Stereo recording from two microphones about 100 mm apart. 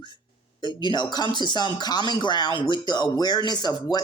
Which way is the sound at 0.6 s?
50° left (ahead or behind).